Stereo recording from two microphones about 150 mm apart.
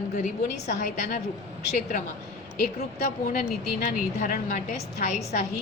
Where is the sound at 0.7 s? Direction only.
55° left (ahead or behind).